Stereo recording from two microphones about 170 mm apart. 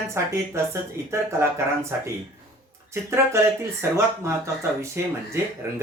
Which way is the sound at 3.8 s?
15° right (ahead or behind).